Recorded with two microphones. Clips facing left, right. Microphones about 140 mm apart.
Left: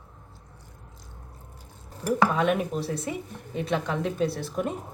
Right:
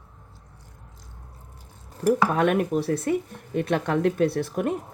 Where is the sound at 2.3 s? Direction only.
55° right (ahead or behind).